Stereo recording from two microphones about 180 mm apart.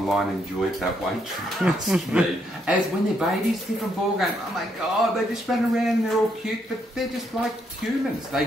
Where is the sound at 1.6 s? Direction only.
5° right (ahead or behind).